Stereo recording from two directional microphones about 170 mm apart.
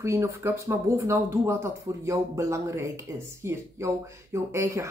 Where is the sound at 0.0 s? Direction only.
20° right (ahead or behind).